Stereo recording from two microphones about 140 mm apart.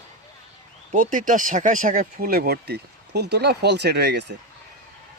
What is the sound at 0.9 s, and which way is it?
Speech, 70° right (ahead or behind).